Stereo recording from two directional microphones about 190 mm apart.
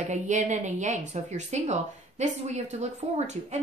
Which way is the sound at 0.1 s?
40° right (ahead or behind).